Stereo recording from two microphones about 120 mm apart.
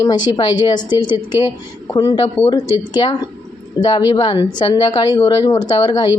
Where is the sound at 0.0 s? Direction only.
35° left (ahead or behind).